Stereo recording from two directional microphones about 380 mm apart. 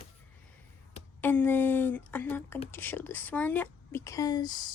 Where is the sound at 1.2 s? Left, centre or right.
Centre.